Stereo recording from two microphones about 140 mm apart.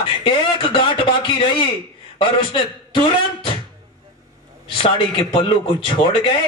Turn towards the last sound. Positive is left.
turn(degrees=35)  # may be behind; listen again after turning